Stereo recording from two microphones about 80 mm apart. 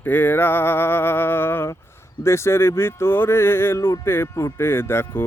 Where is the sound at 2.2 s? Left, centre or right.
Left.